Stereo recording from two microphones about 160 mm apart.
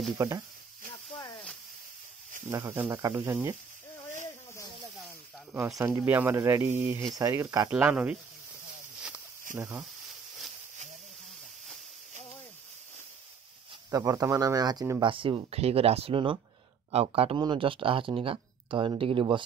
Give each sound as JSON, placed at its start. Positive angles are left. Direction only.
{"t": 0.2, "sound": "speech", "side_deg": -20}
{"t": 1.1, "sound": "snake", "side_deg": 20}
{"t": 2.5, "sound": "speech", "side_deg": -15}
{"t": 5.5, "sound": "speech", "side_deg": -20}
{"t": 7.7, "sound": "speech", "side_deg": -5}
{"t": 9.6, "sound": "speech", "side_deg": -15}
{"t": 13.8, "sound": "speech", "side_deg": -20}